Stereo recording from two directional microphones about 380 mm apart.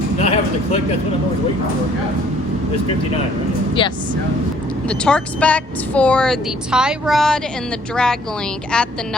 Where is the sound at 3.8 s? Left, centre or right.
Centre.